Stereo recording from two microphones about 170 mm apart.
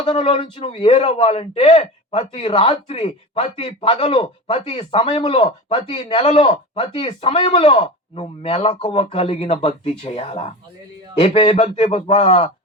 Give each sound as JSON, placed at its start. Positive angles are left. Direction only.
{"t": 0.0, "sound": "speech", "side_deg": 35}